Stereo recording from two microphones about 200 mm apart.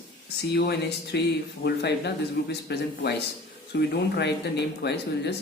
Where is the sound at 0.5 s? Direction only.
55° left (ahead or behind).